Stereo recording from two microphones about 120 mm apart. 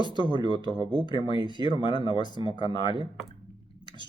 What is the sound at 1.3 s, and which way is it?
Speech, 40° right (ahead or behind).